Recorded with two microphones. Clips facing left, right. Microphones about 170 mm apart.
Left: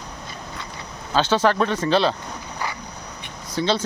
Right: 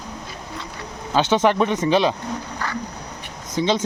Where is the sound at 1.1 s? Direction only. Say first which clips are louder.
Right 1 dB; 20° right (ahead or behind).